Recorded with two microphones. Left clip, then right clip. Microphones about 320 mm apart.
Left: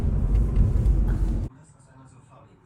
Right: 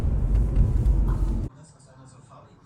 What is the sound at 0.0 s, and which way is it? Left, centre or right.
Vehicle, centre.